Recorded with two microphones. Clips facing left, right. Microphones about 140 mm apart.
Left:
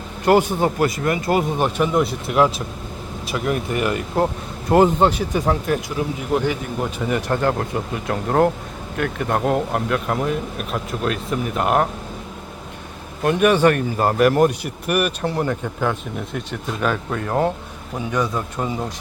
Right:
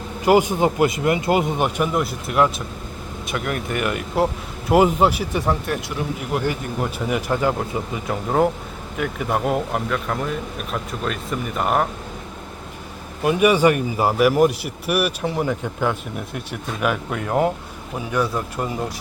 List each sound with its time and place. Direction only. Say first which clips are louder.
0.3 s speech: even; 15° right (ahead or behind)
1.9 s speech: left 3 dB; centre (ahead or behind)
3.4 s speech: left 4 dB; 30° left (ahead or behind)
3.8 s speech: even; 5° right (ahead or behind)
13.2 s speech: even; 10° right (ahead or behind)